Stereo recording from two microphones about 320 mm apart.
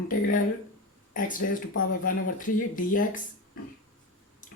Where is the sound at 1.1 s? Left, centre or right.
Left.